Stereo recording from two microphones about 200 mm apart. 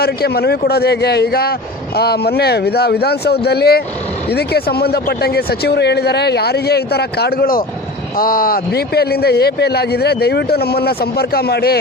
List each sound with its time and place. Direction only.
0.0 s a man's voice: 50° left (ahead or behind)